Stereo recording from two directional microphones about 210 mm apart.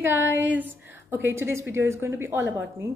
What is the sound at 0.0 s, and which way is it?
A woman's voice, 10° right (ahead or behind).